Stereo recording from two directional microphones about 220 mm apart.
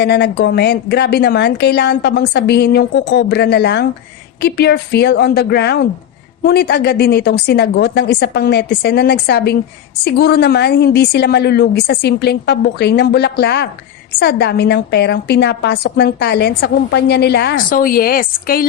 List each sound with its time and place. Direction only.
0.0 s a woman's voice: 50° left (ahead or behind)